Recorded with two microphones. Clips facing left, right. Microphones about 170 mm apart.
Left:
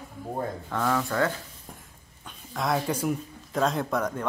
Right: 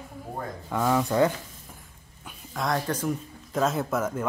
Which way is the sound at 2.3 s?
Centre (ahead or behind).